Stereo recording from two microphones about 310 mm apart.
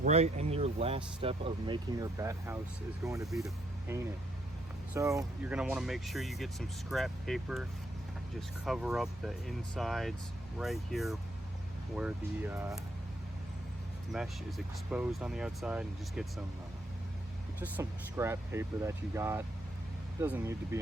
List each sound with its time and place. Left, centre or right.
0.0 s speech: right
14.1 s speech: centre
17.6 s speech: centre